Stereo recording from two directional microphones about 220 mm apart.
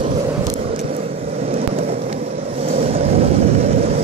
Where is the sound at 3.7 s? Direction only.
40° right (ahead or behind).